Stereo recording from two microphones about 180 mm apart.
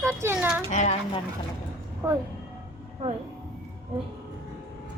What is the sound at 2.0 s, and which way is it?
Speech, 20° right (ahead or behind).